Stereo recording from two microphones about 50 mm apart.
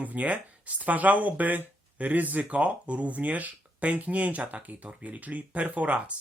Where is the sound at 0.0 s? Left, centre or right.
Right.